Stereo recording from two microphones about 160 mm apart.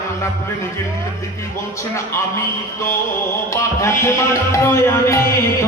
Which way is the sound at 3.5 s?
20° left (ahead or behind).